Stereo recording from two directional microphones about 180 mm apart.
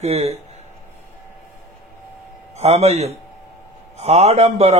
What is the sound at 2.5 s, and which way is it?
A man's voice, 35° right (ahead or behind).